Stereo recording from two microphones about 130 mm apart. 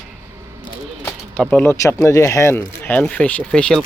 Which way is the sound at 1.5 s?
15° left (ahead or behind).